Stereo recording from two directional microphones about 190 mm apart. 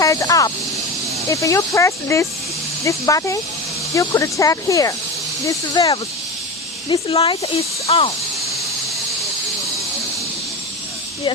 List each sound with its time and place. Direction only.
0.0 s speech: 15° left (ahead or behind)
6.8 s speech: 30° left (ahead or behind)